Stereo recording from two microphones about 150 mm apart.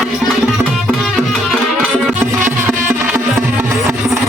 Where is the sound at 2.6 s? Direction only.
15° right (ahead or behind).